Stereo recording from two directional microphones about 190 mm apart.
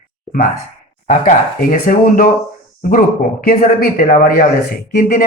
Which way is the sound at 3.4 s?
50° left (ahead or behind).